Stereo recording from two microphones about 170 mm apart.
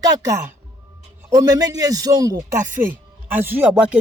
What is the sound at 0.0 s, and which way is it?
A man's voice, 20° right (ahead or behind).